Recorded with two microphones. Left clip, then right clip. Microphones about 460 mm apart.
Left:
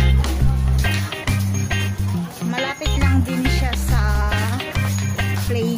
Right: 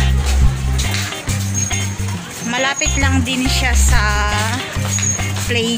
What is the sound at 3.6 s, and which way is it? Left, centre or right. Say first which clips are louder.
Music: right 8 dB; left.